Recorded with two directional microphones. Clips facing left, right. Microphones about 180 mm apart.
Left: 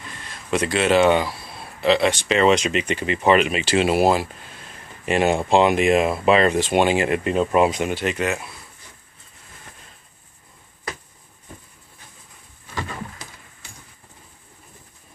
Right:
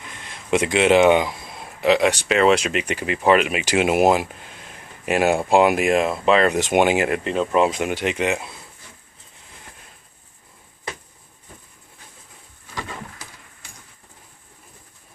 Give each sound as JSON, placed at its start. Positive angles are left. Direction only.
{"t": 0.0, "sound": "a sound", "side_deg": -20}
{"t": 2.2, "sound": "speech", "side_deg": -5}
{"t": 6.5, "sound": "speech", "side_deg": -15}
{"t": 7.1, "sound": "speech", "side_deg": 5}
{"t": 7.9, "sound": "speech", "side_deg": -15}